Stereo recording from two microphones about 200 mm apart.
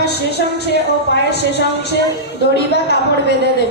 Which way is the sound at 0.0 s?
55° left (ahead or behind).